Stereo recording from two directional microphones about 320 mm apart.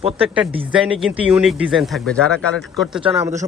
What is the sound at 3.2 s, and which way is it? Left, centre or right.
Speech, centre.